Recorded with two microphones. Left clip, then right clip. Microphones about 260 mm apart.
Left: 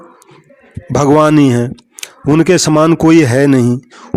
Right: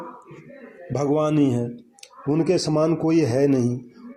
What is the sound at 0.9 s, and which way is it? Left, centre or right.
A man's voice, left.